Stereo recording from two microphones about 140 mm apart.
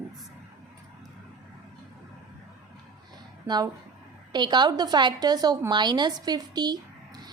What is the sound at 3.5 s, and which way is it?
A woman's voice, 30° right (ahead or behind).